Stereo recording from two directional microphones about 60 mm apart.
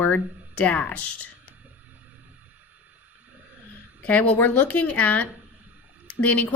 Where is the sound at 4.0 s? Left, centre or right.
Left.